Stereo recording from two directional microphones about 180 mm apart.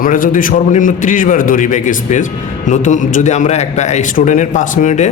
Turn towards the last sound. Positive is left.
turn(degrees=45)  # may be behind; listen again after turning